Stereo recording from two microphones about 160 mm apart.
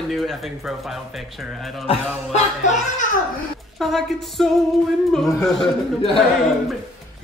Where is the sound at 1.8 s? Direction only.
40° left (ahead or behind).